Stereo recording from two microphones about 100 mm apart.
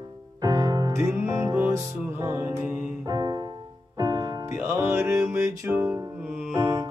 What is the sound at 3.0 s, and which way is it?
Music, 40° right (ahead or behind).